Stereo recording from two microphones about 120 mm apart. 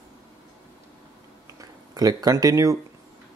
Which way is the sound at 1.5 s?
30° right (ahead or behind).